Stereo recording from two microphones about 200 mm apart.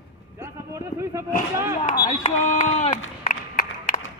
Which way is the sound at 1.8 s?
20° left (ahead or behind).